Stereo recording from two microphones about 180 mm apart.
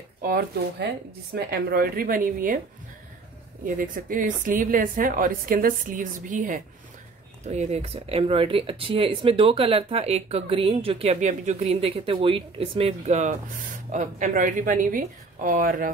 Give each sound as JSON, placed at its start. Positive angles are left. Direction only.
{"t": 0.2, "sound": "a woman's voice", "side_deg": -55}
{"t": 3.6, "sound": "a woman's voice", "side_deg": -50}